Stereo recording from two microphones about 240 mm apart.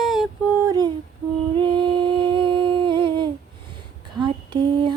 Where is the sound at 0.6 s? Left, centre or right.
Centre.